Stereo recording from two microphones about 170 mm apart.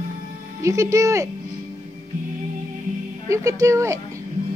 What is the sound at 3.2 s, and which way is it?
Speech, 20° right (ahead or behind).